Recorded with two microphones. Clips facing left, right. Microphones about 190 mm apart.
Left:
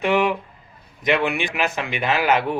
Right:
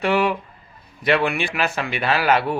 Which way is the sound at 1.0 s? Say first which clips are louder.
Right 1 dB; 20° left (ahead or behind).